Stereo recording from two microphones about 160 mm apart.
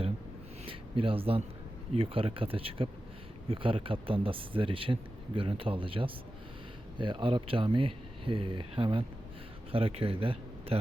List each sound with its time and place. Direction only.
0.7 s speech: 35° right (ahead or behind)